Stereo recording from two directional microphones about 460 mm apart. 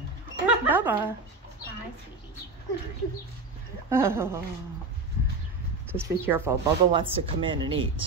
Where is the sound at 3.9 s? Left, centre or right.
Centre.